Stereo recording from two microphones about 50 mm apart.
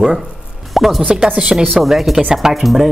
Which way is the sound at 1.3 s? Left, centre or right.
Centre.